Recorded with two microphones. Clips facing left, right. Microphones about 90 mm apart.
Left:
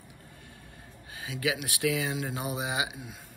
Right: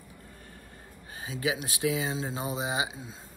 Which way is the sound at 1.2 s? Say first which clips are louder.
Even; 30° right (ahead or behind).